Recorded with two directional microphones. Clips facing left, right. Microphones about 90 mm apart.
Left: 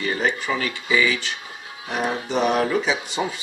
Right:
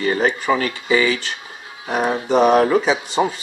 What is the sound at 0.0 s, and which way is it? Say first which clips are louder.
Speech: right 5 dB; 45° right (ahead or behind).